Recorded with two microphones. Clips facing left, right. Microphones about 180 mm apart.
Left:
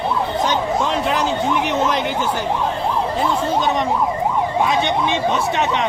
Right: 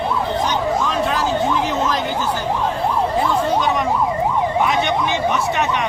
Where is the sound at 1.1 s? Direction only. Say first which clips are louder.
Even; 20° left (ahead or behind).